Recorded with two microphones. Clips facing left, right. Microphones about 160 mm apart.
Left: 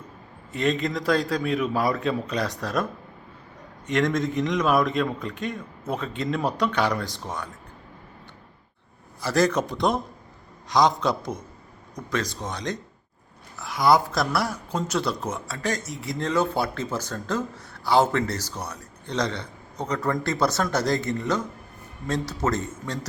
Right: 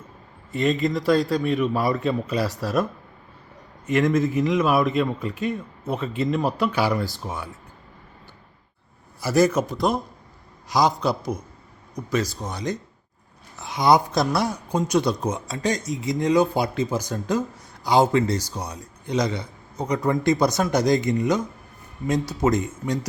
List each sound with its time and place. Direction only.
0.5 s a man's voice: centre (ahead or behind)
3.8 s a man's voice: 5° right (ahead or behind)
9.2 s a man's voice: 10° right (ahead or behind)
13.6 s speech: 20° right (ahead or behind)